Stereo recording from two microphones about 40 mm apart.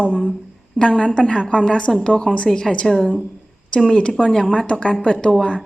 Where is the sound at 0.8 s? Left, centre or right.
Left.